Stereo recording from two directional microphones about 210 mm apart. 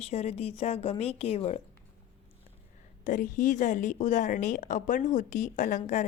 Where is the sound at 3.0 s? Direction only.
40° left (ahead or behind).